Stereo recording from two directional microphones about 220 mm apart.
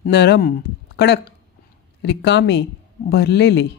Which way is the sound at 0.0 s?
50° left (ahead or behind).